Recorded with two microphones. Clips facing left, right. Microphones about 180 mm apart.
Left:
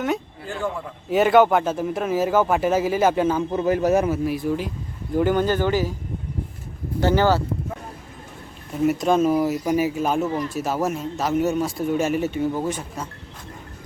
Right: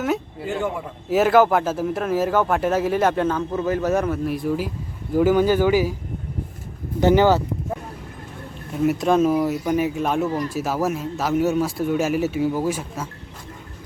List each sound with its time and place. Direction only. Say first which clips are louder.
0.0 s a man's voice: right 1 dB; 5° right (ahead or behind)
7.0 s speech: right 3 dB; 15° right (ahead or behind)
8.8 s a man's voice: right 1 dB; centre (ahead or behind)